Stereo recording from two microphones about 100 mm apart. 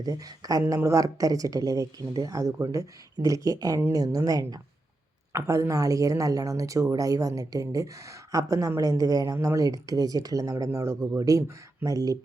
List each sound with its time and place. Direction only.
0.0 s speech: 40° right (ahead or behind)